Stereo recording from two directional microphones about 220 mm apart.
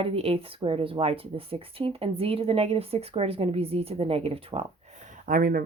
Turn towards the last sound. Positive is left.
turn(degrees=-40)  # may be behind; listen again after turning